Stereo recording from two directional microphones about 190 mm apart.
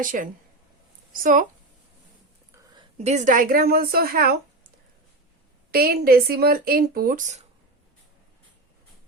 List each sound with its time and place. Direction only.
0.0 s speech: 45° right (ahead or behind)
2.7 s speech: 35° right (ahead or behind); by 4.4 s 50° right (ahead or behind)
5.7 s speech: 55° right (ahead or behind)